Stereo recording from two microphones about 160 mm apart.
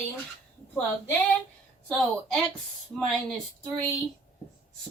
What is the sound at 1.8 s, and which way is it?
A woman's voice, centre (ahead or behind).